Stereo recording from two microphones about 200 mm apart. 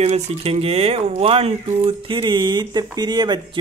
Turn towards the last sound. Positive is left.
turn(degrees=-20)  # may be behind; listen again after turning